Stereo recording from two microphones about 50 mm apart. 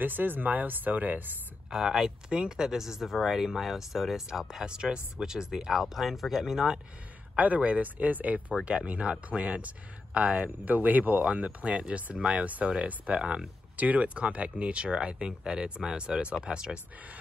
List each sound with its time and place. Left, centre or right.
0.0 s speech: right
1.7 s speech: centre
7.3 s speech: right